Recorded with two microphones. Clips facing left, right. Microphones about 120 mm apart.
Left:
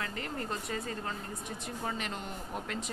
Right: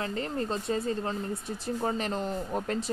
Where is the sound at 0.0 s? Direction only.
30° right (ahead or behind).